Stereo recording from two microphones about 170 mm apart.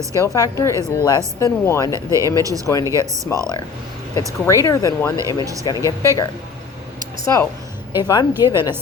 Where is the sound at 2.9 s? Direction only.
20° right (ahead or behind).